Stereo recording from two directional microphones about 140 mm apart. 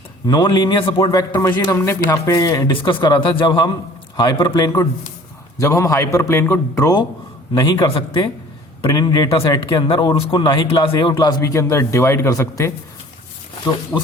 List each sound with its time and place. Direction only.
0.3 s speech: 30° left (ahead or behind)
1.0 s speech: 25° left (ahead or behind)
13.9 s speech: 10° left (ahead or behind)